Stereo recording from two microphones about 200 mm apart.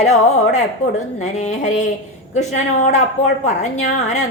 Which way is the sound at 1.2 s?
35° left (ahead or behind).